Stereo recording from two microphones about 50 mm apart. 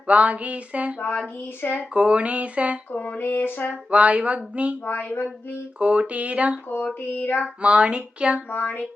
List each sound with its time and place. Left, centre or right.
0.1 s speech: right
0.9 s a sound: left
1.9 s speech: right
2.9 s a sound: left
3.8 s speech: right
4.9 s speech: left
5.8 s speech: right
7.1 s speech: left
7.6 s speech: right
8.4 s a sound: left